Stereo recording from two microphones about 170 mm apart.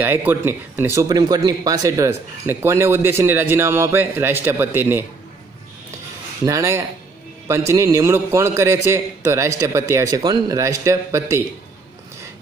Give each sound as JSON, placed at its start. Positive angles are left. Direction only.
{"t": 0.0, "sound": "speech", "side_deg": -10}
{"t": 6.4, "sound": "speech", "side_deg": -20}